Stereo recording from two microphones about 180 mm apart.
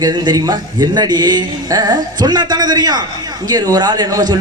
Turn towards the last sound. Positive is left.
turn(degrees=-20)  # may be behind; listen again after turning